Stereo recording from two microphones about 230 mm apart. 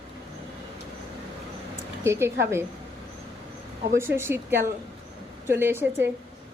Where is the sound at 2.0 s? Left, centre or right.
Centre.